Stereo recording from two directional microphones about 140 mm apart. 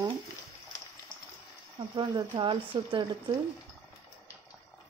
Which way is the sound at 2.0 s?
35° right (ahead or behind).